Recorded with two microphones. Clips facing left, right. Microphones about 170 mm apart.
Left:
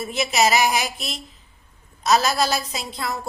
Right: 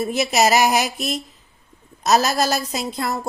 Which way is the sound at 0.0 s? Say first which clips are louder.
Right 3 dB; 45° right (ahead or behind).